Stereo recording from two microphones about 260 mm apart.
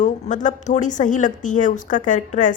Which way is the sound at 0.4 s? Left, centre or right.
Left.